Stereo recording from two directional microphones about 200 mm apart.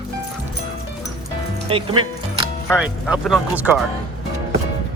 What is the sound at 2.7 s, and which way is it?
Speech, 5° right (ahead or behind).